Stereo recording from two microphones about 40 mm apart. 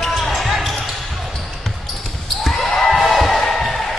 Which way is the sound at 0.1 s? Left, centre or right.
Centre.